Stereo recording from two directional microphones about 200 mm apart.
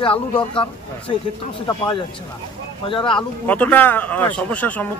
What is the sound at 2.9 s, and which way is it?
Speech, 25° left (ahead or behind).